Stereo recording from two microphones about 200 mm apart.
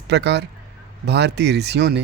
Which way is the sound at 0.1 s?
60° right (ahead or behind).